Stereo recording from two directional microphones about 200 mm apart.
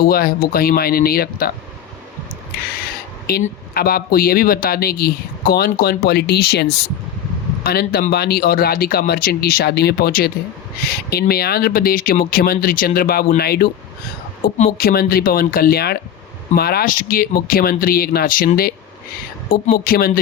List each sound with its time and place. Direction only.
0.0 s speech: 50° left (ahead or behind)
3.4 s speech: 50° left (ahead or behind)